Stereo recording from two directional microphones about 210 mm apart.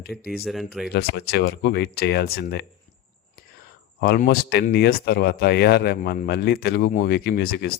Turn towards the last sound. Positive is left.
turn(degrees=50)  # may be behind; listen again after turning